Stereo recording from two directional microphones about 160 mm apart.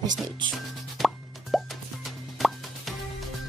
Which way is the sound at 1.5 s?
Centre (ahead or behind).